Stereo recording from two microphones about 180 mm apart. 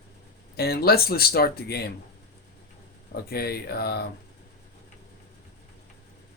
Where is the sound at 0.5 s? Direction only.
60° left (ahead or behind).